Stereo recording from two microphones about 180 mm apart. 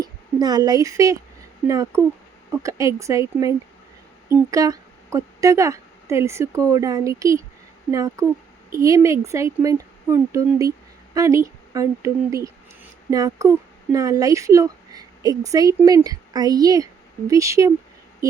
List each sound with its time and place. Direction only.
0.0 s a woman's voice: 20° right (ahead or behind)
4.5 s a woman's voice: 20° right (ahead or behind)